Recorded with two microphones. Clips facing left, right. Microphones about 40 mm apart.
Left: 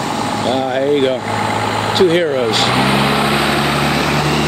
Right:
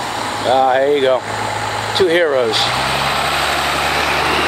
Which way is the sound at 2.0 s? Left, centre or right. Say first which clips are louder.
Right 1 dB; centre.